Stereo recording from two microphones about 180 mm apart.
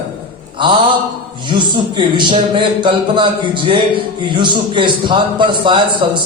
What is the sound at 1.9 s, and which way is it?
A man's voice, 25° right (ahead or behind).